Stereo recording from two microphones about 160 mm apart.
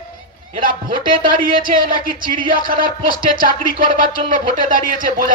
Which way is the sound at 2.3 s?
30° right (ahead or behind).